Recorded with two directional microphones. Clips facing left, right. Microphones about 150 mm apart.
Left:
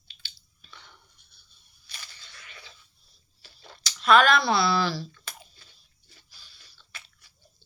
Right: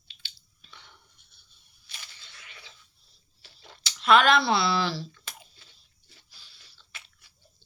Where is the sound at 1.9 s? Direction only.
20° right (ahead or behind).